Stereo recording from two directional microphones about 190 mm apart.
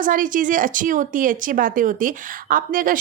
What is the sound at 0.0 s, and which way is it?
Speech, 45° right (ahead or behind).